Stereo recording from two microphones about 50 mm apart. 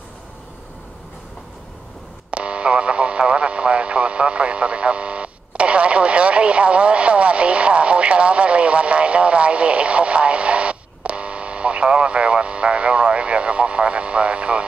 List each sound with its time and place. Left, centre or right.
2.3 s radio: right